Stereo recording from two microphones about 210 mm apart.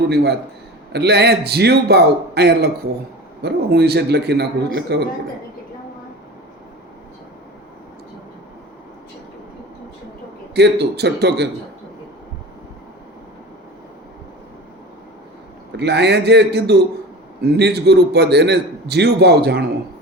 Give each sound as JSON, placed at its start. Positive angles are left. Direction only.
{"t": 0.1, "sound": "a man's voice", "side_deg": -50}
{"t": 10.5, "sound": "a man's voice", "side_deg": -50}
{"t": 15.8, "sound": "a man's voice", "side_deg": -55}